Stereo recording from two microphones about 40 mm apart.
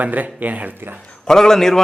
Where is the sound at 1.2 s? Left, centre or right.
Centre.